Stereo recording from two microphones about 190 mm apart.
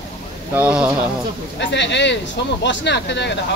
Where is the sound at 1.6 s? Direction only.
65° left (ahead or behind).